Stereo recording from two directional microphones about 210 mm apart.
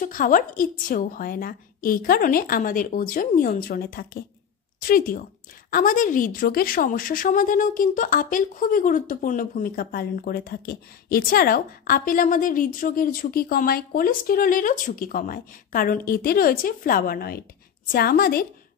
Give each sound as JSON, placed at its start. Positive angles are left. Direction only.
{"t": 0.0, "sound": "a woman's voice", "side_deg": 40}